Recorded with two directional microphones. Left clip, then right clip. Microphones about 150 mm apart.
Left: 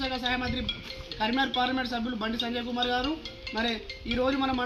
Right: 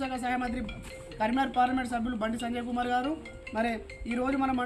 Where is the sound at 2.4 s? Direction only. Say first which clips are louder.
Left 2 dB; 30° right (ahead or behind).